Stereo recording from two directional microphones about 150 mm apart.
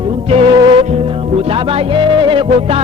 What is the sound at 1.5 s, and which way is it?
Speech, 35° right (ahead or behind).